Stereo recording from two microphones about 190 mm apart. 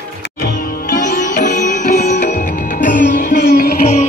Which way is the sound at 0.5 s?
50° left (ahead or behind).